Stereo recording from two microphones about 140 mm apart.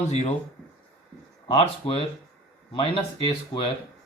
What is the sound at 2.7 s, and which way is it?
Speech, 35° left (ahead or behind).